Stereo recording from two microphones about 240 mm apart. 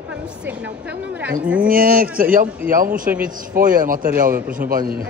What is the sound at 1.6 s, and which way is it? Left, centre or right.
A man's voice, right.